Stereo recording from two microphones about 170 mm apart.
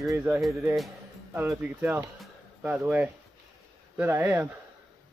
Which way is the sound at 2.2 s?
10° right (ahead or behind).